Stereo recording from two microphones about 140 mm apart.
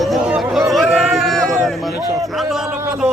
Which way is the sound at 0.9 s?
Centre (ahead or behind).